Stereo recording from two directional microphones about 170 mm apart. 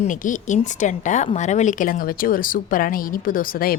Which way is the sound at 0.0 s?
50° left (ahead or behind).